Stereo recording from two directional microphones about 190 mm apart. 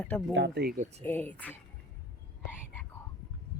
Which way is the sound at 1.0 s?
10° left (ahead or behind).